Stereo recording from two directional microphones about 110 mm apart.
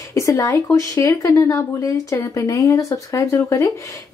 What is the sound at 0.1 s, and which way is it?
Speech, 30° left (ahead or behind).